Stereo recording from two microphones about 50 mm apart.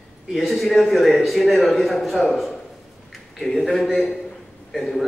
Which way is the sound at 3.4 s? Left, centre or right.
Centre.